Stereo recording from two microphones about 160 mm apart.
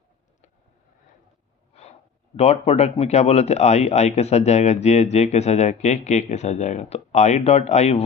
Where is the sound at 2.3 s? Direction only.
40° left (ahead or behind).